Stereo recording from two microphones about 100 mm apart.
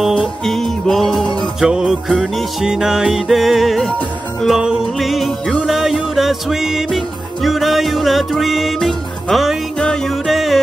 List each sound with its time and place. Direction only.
0.5 s music: 5° left (ahead or behind)